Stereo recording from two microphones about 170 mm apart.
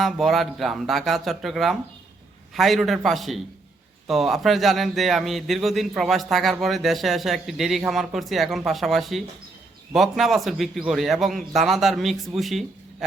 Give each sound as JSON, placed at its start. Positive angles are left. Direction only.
{"t": 0.0, "sound": "a man's voice", "side_deg": 0}